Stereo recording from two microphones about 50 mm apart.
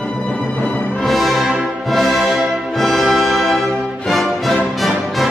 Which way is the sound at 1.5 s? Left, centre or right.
Right.